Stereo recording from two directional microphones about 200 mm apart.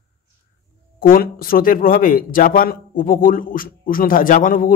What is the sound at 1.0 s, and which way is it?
Speech, 45° left (ahead or behind).